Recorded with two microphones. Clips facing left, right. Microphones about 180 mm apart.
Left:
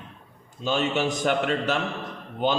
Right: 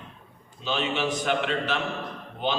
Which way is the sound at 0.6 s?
45° left (ahead or behind).